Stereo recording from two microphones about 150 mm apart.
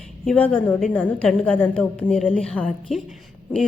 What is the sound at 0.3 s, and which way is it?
A woman's voice, 10° left (ahead or behind).